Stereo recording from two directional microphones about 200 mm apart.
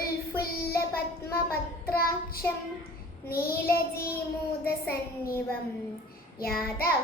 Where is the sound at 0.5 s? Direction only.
50° left (ahead or behind).